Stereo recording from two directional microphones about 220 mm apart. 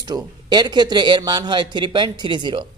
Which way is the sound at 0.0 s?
15° right (ahead or behind).